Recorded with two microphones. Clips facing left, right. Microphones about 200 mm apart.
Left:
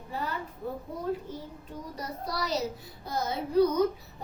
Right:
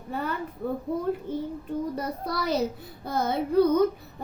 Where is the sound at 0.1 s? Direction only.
60° right (ahead or behind).